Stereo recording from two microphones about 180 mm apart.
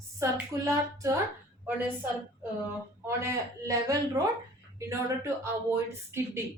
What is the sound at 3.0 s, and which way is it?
Speech, 15° right (ahead or behind).